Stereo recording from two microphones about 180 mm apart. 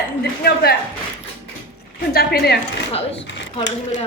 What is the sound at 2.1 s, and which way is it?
Speech, 60° left (ahead or behind).